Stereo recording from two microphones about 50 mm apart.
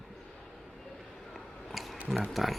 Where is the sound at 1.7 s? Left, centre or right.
Centre.